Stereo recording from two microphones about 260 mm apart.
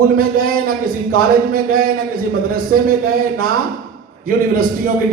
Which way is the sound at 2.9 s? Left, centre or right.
Right.